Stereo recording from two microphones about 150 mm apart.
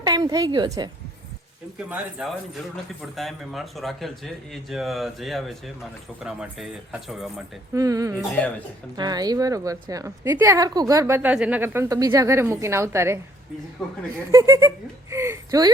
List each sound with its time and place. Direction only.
0.0 s speech: 25° right (ahead or behind)
1.9 s speech: 5° right (ahead or behind)
7.7 s a woman's voice: 20° right (ahead or behind)
13.8 s speech: centre (ahead or behind)
14.3 s speech: 20° right (ahead or behind)
15.1 s a sound: 20° right (ahead or behind)